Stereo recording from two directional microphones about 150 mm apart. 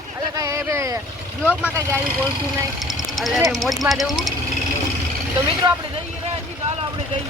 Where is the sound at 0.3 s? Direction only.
20° right (ahead or behind).